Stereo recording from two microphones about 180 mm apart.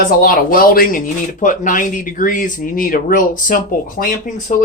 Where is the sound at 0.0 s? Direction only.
55° left (ahead or behind).